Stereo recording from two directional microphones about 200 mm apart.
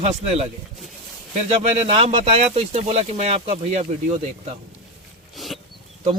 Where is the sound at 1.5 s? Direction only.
30° right (ahead or behind).